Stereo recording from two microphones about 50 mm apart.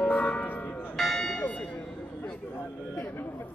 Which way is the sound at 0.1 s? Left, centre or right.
Left.